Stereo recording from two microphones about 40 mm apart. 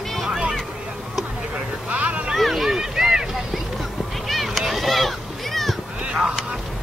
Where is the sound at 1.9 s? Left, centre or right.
Right.